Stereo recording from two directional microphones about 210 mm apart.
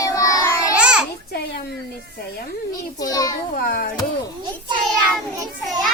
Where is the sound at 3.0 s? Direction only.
15° left (ahead or behind).